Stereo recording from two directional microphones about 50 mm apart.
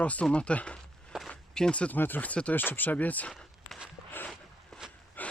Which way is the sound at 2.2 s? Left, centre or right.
Left.